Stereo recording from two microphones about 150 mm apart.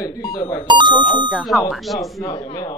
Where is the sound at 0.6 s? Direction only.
30° right (ahead or behind).